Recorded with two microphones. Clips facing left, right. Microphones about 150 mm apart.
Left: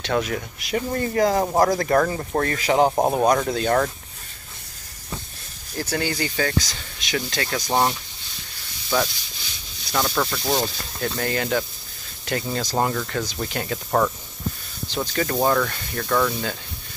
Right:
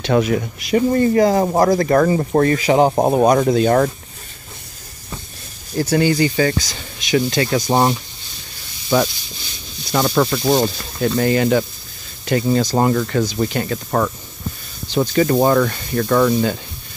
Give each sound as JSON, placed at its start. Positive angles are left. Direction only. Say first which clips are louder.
{"t": 0.0, "sound": "speech", "louder": "right 7 dB", "side_deg": -10}
{"t": 5.8, "sound": "speech", "louder": "right 10 dB", "side_deg": -5}
{"t": 11.1, "sound": "speech", "louder": "right 8 dB", "side_deg": -5}
{"t": 15.3, "sound": "speech", "louder": "right 3 dB", "side_deg": -15}